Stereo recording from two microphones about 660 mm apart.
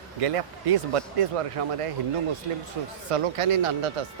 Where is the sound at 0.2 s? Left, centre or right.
Right.